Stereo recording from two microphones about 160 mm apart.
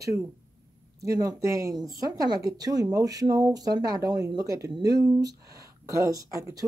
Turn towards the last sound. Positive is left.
turn(degrees=-20)  # may be behind; listen again after turning